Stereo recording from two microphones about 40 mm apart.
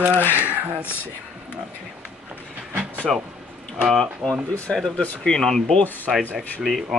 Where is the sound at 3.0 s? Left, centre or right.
Centre.